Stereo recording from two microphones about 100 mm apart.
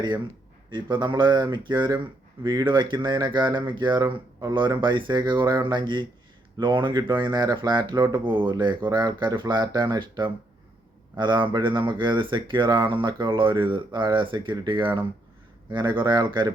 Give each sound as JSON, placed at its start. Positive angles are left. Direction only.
{"t": 0.7, "sound": "speech", "side_deg": -50}